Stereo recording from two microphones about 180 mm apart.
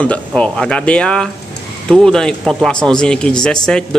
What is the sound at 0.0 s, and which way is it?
A man's voice, 5° left (ahead or behind).